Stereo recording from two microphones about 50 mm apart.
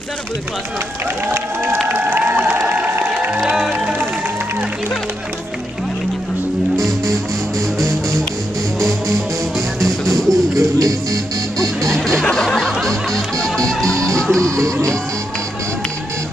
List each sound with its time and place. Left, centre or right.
1.3 s crowd: right
6.7 s music: centre
8.8 s music: centre
10.6 s music: right
11.9 s music: centre
14.5 s music: right